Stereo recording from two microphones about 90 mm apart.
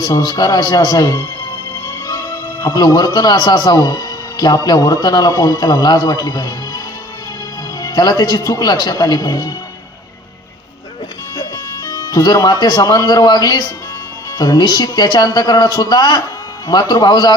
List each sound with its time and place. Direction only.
0.1 s speech: 45° left (ahead or behind)
11.3 s speech: 40° left (ahead or behind)